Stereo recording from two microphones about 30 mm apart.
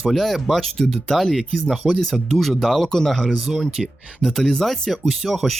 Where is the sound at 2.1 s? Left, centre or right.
Centre.